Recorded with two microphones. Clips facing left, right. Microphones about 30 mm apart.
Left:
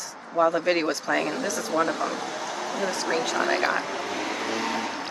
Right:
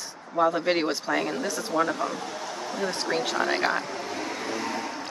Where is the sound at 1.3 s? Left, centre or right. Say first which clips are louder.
Left 1 dB; left.